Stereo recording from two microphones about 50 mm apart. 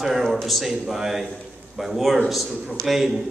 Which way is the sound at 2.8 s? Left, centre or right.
Right.